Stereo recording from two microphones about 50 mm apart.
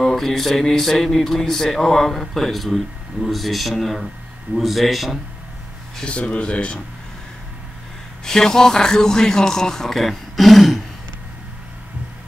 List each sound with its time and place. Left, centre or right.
0.0 s speech: centre
6.0 s speech: left
8.2 s speech: centre